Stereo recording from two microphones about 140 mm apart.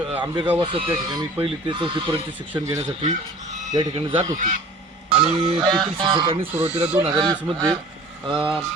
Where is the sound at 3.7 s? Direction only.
35° right (ahead or behind).